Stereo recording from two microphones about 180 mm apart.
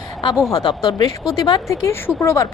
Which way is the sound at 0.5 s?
25° left (ahead or behind).